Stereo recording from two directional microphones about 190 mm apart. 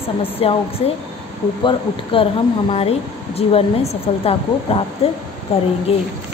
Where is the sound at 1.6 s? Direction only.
25° left (ahead or behind).